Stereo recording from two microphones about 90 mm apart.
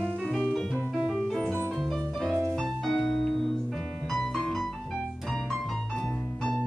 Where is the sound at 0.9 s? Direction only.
Centre (ahead or behind).